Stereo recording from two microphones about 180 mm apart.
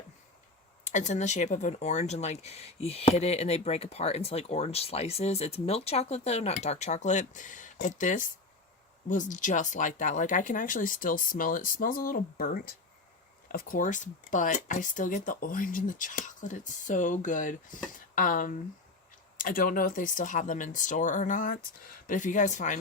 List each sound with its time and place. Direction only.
0.9 s speech: 40° left (ahead or behind)